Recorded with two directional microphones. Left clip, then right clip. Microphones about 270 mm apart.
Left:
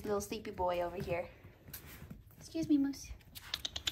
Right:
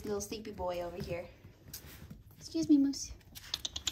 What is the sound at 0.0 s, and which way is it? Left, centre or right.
A woman's voice, centre.